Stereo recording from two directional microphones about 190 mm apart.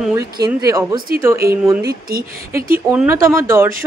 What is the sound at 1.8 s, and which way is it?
Speech, 55° right (ahead or behind).